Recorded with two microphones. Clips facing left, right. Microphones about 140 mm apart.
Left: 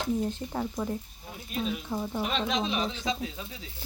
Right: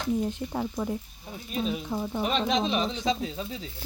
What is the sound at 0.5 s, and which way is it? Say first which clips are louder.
Speech: right 1 dB; 5° right (ahead or behind).